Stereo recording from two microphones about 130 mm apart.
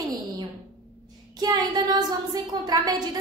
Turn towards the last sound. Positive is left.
turn(degrees=-30)  # may be behind; listen again after turning